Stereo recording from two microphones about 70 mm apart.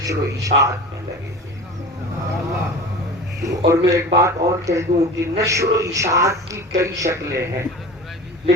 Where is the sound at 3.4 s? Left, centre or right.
Right.